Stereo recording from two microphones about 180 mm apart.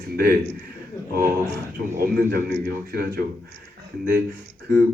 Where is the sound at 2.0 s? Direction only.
55° right (ahead or behind).